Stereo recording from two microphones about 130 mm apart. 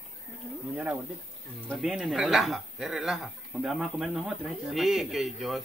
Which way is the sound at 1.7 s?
Centre (ahead or behind).